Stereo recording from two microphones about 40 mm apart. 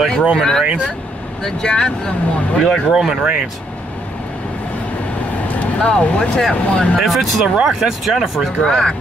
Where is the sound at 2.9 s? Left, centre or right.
Centre.